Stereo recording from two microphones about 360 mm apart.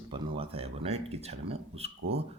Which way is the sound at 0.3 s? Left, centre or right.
Centre.